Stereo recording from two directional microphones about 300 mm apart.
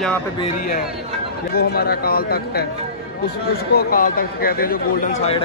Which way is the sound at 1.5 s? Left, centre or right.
Left.